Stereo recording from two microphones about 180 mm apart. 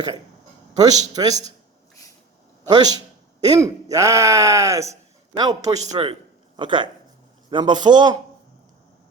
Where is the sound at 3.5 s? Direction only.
20° right (ahead or behind).